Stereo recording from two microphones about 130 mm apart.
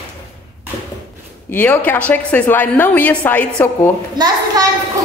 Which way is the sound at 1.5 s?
15° left (ahead or behind).